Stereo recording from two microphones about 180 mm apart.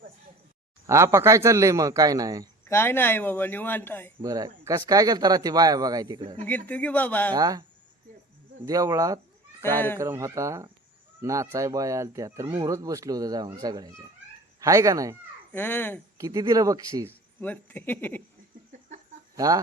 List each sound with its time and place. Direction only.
0.9 s speech: 15° right (ahead or behind)
2.6 s speech: 10° left (ahead or behind)
4.2 s speech: 20° right (ahead or behind)
6.7 s speech: 10° left (ahead or behind)
7.3 s speech: 20° right (ahead or behind)
8.6 s speech: 20° right (ahead or behind)
9.6 s speech: 10° left (ahead or behind)
10.0 s speech: 15° right (ahead or behind)
15.5 s speech: 10° left (ahead or behind)
16.1 s speech: 20° right (ahead or behind)
17.1 s speech: 10° left (ahead or behind)